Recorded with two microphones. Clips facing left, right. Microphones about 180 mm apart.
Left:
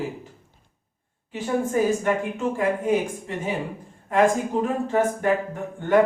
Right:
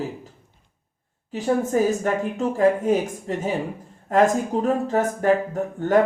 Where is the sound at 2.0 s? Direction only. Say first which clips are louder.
Right 1 dB; 40° right (ahead or behind).